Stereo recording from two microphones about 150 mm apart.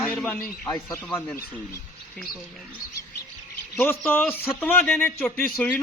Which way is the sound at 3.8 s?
15° left (ahead or behind).